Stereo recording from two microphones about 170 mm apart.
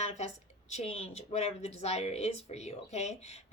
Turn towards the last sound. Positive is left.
turn(degrees=40)  # may be behind; listen again after turning